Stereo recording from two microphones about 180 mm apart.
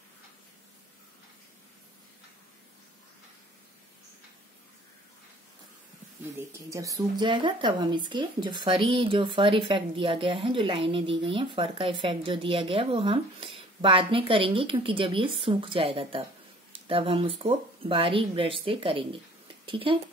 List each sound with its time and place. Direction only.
6.3 s a woman's voice: 15° right (ahead or behind)